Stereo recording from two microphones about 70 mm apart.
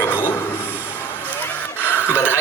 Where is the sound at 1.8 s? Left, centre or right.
Left.